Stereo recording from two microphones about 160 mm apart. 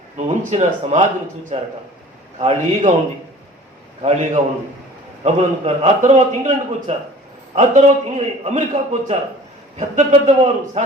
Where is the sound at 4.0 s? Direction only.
40° right (ahead or behind).